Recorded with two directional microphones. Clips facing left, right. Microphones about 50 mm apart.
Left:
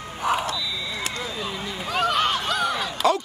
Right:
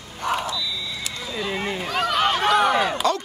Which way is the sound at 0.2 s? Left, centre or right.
Centre.